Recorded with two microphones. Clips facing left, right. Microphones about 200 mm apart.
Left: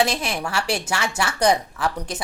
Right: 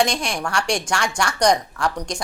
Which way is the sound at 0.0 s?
5° left (ahead or behind).